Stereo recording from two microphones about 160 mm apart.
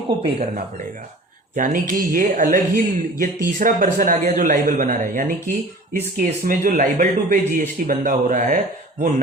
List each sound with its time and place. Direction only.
0.2 s speech: 40° right (ahead or behind)
1.5 s speech: 55° right (ahead or behind)